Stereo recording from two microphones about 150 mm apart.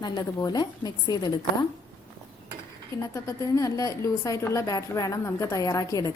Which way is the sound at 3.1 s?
20° left (ahead or behind).